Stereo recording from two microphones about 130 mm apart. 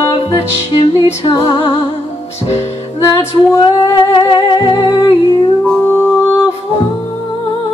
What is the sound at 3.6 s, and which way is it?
Humming, 35° left (ahead or behind).